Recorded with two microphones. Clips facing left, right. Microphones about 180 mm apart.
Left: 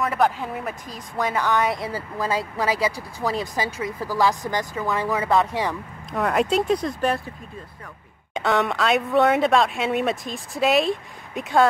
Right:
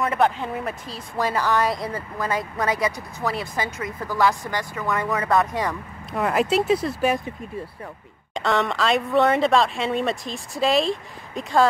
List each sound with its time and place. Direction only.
0.0 s a woman's voice: centre (ahead or behind); by 4.8 s 20° left (ahead or behind)
5.0 s a woman's voice: 5° left (ahead or behind)
5.3 s speech: 20° left (ahead or behind)
5.6 s a woman's voice: centre (ahead or behind)
8.4 s a woman's voice: centre (ahead or behind)